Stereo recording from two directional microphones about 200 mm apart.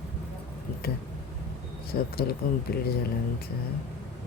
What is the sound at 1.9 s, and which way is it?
Speech, 50° left (ahead or behind).